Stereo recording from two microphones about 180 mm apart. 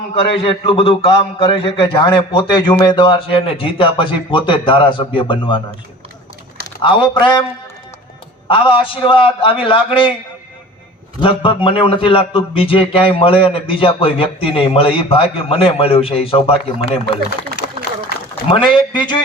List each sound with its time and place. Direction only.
0.1 s a man's voice: 30° left (ahead or behind)
6.8 s a man's voice: 25° left (ahead or behind)
8.4 s a man's voice: 30° left (ahead or behind)
11.2 s speech: 30° left (ahead or behind)
18.4 s a man's voice: 25° left (ahead or behind)